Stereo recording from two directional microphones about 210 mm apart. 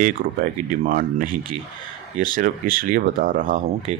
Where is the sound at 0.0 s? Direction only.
40° right (ahead or behind).